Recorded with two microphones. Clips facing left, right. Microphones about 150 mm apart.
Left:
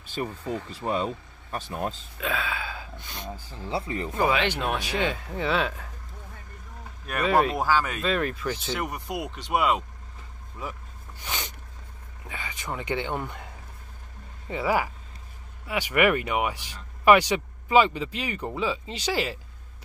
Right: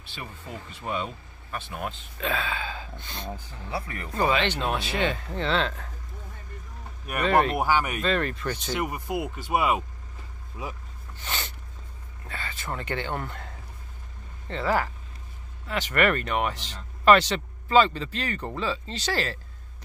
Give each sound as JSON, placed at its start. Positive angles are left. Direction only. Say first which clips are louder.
{"t": 0.0, "sound": "speech", "louder": "left 9 dB", "side_deg": 40}
{"t": 2.1, "sound": "speech", "louder": "right 4 dB", "side_deg": 5}
{"t": 3.6, "sound": "speech", "louder": "left 5 dB", "side_deg": 25}
{"t": 4.1, "sound": "speech", "louder": "even", "side_deg": 10}
{"t": 7.2, "sound": "speech", "louder": "even", "side_deg": 5}
{"t": 7.5, "sound": "speech", "louder": "even", "side_deg": -15}
{"t": 8.0, "sound": "speech", "louder": "even", "side_deg": 5}
{"t": 11.1, "sound": "a sound", "louder": "even", "side_deg": 10}
{"t": 12.3, "sound": "speech", "louder": "even", "side_deg": 15}
{"t": 14.5, "sound": "speech", "louder": "even", "side_deg": 10}